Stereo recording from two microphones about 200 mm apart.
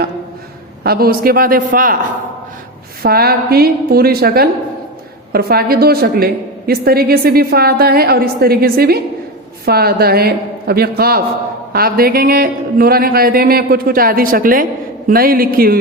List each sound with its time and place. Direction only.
0.9 s speech: 50° right (ahead or behind)
3.0 s speech: 50° right (ahead or behind)